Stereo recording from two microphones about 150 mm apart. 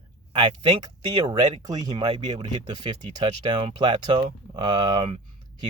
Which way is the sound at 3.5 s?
30° right (ahead or behind).